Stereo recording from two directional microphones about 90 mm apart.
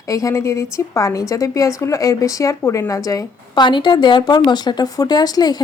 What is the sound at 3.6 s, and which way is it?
A woman's voice, 60° left (ahead or behind).